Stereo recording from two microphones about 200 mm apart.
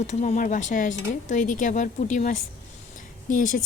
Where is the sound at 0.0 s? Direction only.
35° left (ahead or behind).